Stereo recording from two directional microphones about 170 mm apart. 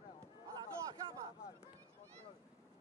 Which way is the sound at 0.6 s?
25° right (ahead or behind).